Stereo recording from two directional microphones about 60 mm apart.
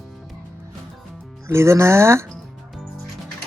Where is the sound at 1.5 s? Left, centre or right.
Right.